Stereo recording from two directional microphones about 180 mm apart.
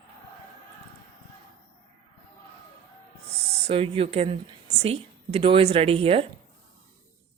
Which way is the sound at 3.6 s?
30° right (ahead or behind).